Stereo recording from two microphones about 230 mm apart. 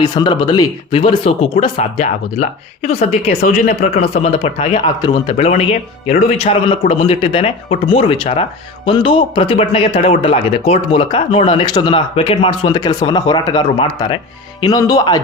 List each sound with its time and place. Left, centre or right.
0.0 s speech: centre; by 3.8 s left
4.2 s speech: left